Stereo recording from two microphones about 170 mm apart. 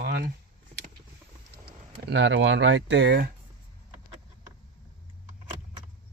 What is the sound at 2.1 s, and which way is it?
Speech, 90° right.